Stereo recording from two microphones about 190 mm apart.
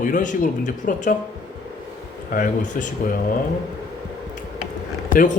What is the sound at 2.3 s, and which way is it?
Speech, 45° left (ahead or behind).